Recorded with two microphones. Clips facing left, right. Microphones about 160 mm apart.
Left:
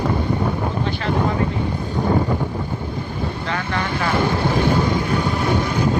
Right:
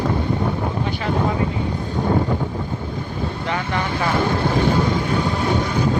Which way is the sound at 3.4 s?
15° right (ahead or behind).